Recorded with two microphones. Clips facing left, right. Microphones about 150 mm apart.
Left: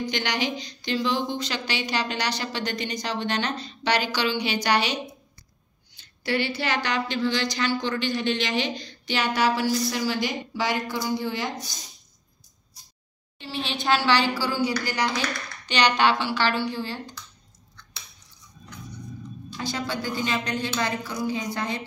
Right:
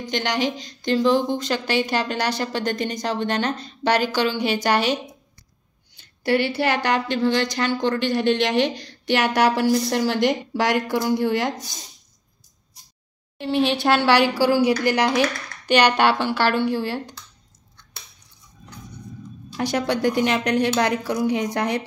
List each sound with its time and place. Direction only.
0.1 s a woman's voice: centre (ahead or behind)
0.8 s speech: 45° right (ahead or behind)
5.9 s speech: 60° right (ahead or behind)
13.7 s a woman's voice: 65° right (ahead or behind)
19.5 s a woman's voice: 70° right (ahead or behind)